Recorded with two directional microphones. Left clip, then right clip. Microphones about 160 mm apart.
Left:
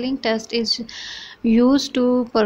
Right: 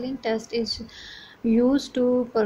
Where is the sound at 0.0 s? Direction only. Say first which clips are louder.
Left 5 dB; 15° left (ahead or behind).